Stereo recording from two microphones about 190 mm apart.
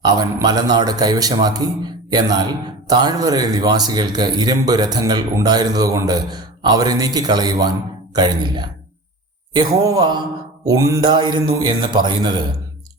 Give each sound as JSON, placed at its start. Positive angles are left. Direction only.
{"t": 0.0, "sound": "a man's voice", "side_deg": -20}